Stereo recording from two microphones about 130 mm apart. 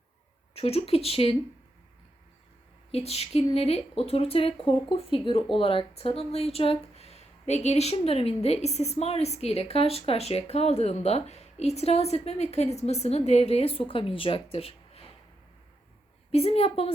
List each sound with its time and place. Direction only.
0.5 s speech: 50° left (ahead or behind)
2.9 s speech: 50° left (ahead or behind)
16.3 s speech: 50° left (ahead or behind)